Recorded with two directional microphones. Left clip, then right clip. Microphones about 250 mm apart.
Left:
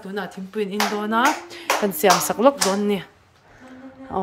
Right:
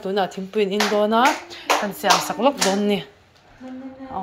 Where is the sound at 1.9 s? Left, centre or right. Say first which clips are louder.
Left 1 dB; left.